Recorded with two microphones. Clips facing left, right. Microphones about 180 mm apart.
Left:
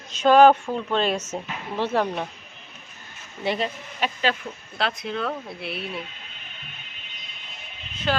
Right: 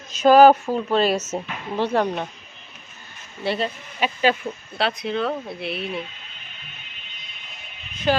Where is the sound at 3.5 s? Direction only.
15° left (ahead or behind).